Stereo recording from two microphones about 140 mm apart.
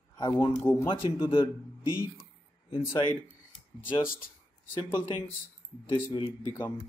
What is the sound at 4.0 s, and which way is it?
Speech, 90° left.